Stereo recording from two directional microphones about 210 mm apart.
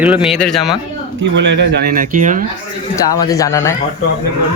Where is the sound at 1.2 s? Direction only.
55° right (ahead or behind); by 2.5 s 40° right (ahead or behind).